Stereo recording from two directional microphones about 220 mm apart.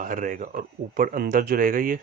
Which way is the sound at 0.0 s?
35° right (ahead or behind).